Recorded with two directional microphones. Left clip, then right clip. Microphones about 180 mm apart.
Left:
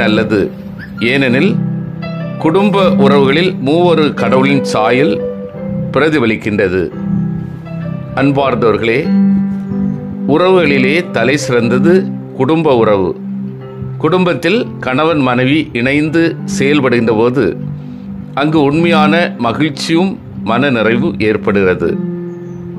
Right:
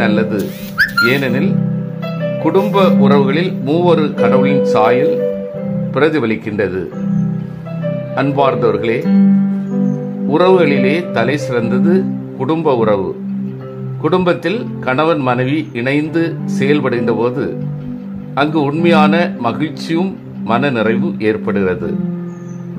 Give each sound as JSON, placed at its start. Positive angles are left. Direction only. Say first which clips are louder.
{"t": 0.0, "sound": "speech", "louder": "left 4 dB", "side_deg": 30}
{"t": 8.2, "sound": "speech", "louder": "left 2 dB", "side_deg": 25}
{"t": 10.2, "sound": "speech", "louder": "left 1 dB", "side_deg": 25}